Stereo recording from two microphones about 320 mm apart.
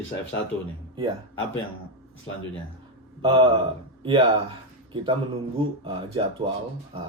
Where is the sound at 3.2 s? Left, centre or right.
Centre.